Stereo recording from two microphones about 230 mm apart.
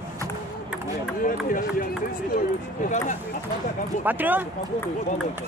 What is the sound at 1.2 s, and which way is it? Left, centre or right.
Speech, left.